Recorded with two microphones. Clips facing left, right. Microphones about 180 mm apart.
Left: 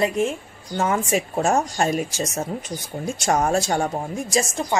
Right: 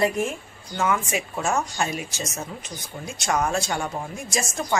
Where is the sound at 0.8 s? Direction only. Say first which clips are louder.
Left 3 dB; 35° left (ahead or behind).